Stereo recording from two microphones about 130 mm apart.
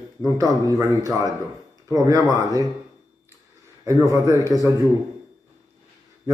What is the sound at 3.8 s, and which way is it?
Speech, 25° right (ahead or behind).